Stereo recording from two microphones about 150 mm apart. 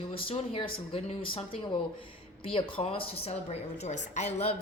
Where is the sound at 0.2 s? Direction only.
35° left (ahead or behind).